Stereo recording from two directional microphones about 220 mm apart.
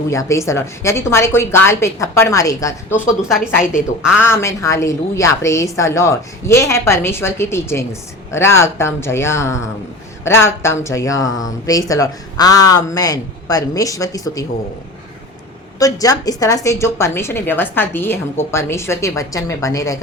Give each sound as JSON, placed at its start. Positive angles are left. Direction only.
{"t": 0.1, "sound": "a woman's voice", "side_deg": 15}
{"t": 3.2, "sound": "a woman's voice", "side_deg": 0}
{"t": 4.2, "sound": "a woman's voice", "side_deg": 10}
{"t": 15.8, "sound": "a woman's voice", "side_deg": 15}